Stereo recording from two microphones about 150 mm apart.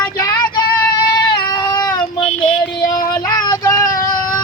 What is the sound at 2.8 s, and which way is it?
Child singing, 25° left (ahead or behind).